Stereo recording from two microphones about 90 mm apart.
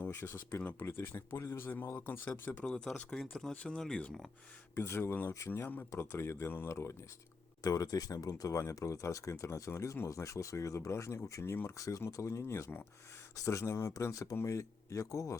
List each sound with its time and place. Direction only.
0.0 s speech: 25° left (ahead or behind)
0.6 s speech: 20° left (ahead or behind)
2.5 s speech: 15° left (ahead or behind)
4.7 s speech: 30° left (ahead or behind)
7.6 s speech: 40° left (ahead or behind)